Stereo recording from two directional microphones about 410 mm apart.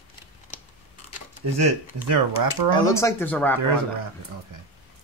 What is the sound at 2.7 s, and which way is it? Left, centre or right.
Speech, centre.